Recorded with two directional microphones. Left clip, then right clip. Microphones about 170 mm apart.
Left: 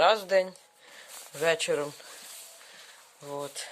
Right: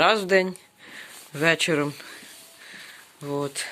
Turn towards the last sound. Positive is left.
turn(degrees=20)  # may be behind; listen again after turning